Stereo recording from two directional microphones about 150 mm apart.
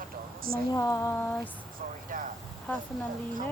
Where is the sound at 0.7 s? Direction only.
20° left (ahead or behind).